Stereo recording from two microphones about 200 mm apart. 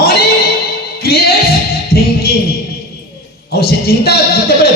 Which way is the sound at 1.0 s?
50° left (ahead or behind).